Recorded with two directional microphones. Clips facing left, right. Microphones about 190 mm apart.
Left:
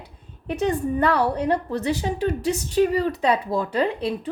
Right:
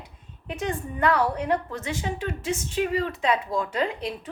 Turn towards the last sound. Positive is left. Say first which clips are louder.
# left 5 dB
turn(degrees=35)  # may be behind; listen again after turning